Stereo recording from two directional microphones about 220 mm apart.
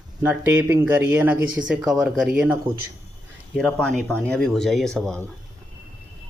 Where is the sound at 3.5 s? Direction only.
5° left (ahead or behind).